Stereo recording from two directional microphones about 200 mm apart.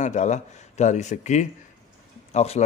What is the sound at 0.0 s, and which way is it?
A man's voice, 35° left (ahead or behind).